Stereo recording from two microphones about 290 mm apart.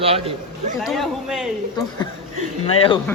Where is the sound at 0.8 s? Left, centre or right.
Centre.